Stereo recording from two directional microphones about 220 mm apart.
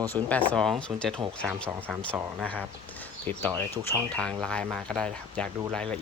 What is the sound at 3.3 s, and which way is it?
Speech, 10° left (ahead or behind).